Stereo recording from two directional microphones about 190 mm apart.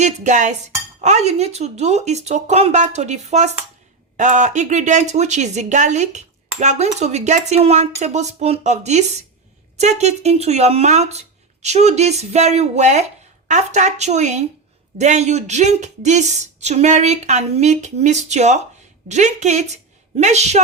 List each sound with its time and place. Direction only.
0.0 s a woman's voice: 40° right (ahead or behind)